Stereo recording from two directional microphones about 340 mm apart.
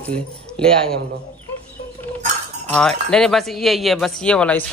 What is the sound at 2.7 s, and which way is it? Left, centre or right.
A man's voice, centre.